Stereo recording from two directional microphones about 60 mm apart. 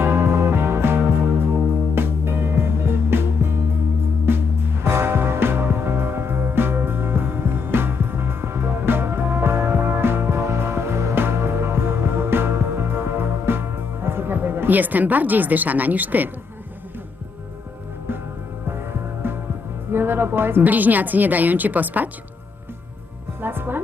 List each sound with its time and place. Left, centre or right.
0.0 s music: right
4.3 s music: right
18.7 s music: right
19.9 s a woman's voice: right
23.4 s music: right